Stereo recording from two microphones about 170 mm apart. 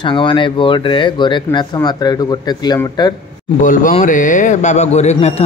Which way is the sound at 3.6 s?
50° left (ahead or behind).